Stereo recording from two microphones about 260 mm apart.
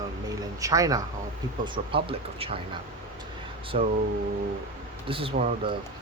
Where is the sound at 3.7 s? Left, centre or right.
Right.